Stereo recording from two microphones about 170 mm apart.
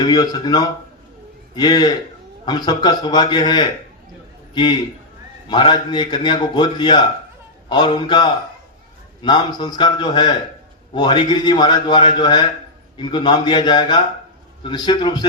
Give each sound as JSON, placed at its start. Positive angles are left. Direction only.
{"t": 0.0, "sound": "a man's voice", "side_deg": 25}
{"t": 5.5, "sound": "a man's voice", "side_deg": 25}